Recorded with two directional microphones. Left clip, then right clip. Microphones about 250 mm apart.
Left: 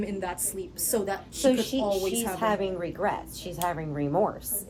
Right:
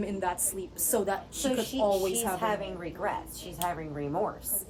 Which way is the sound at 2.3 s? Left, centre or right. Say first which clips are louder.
Left 4 dB; centre.